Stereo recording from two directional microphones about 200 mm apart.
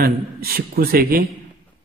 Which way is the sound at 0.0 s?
50° right (ahead or behind).